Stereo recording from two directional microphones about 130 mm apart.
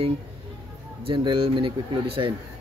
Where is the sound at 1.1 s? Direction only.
40° right (ahead or behind).